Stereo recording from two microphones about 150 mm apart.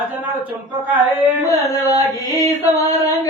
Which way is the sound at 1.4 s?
20° left (ahead or behind).